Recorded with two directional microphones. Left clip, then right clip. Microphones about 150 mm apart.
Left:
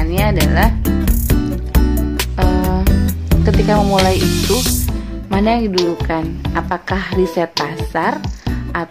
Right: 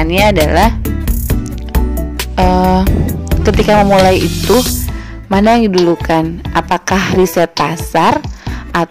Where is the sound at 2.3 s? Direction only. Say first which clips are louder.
Right 10 dB; 60° right (ahead or behind).